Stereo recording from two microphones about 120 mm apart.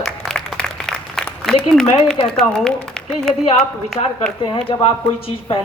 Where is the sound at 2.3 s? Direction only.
5° left (ahead or behind).